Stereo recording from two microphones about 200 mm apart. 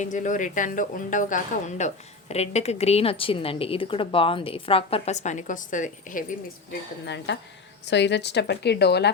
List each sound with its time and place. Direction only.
0.0 s a woman's voice: 40° left (ahead or behind)
7.3 s a woman's voice: 60° left (ahead or behind)